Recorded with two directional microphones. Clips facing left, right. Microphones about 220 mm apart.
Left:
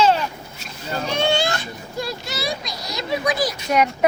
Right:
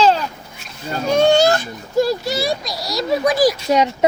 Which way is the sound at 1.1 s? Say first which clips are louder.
Right 9 dB; 40° right (ahead or behind).